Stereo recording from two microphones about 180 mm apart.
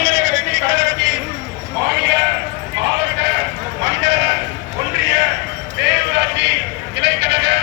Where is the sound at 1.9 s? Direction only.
65° right (ahead or behind).